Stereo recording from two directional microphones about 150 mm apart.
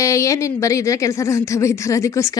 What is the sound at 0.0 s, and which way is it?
A woman's voice, 20° left (ahead or behind).